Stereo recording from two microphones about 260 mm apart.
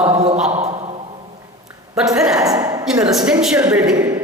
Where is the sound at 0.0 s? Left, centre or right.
Right.